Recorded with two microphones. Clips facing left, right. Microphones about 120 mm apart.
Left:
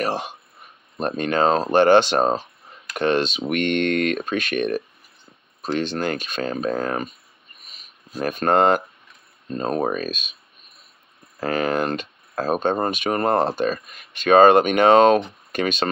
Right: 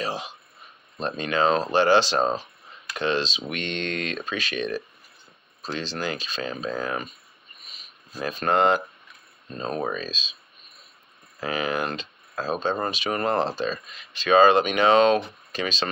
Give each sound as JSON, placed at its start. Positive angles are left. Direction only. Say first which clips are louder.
{"t": 0.0, "sound": "speech", "louder": "left 5 dB", "side_deg": 65}
{"t": 0.9, "sound": "speech", "louder": "left 4 dB", "side_deg": 50}
{"t": 7.6, "sound": "a sound", "louder": "left 2 dB", "side_deg": 50}
{"t": 9.5, "sound": "speech", "louder": "left 5 dB", "side_deg": 45}
{"t": 11.3, "sound": "speech", "louder": "left 5 dB", "side_deg": 55}